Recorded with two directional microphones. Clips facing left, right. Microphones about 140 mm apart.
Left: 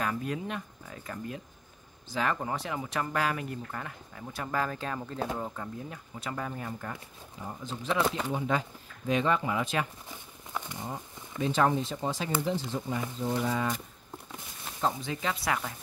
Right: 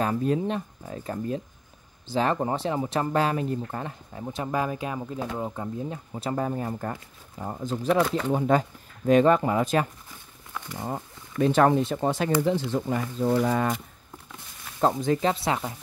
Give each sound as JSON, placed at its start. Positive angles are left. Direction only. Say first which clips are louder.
{"t": 0.0, "sound": "speech", "louder": "right 8 dB", "side_deg": -30}
{"t": 5.4, "sound": "speech", "louder": "right 6 dB", "side_deg": -25}
{"t": 10.9, "sound": "speech", "louder": "right 6 dB", "side_deg": -55}
{"t": 14.8, "sound": "speech", "louder": "right 9 dB", "side_deg": -50}
{"t": 15.3, "sound": "speech", "louder": "right 4 dB", "side_deg": -25}